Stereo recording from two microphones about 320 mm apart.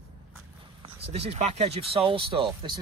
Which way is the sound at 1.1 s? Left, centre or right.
Centre.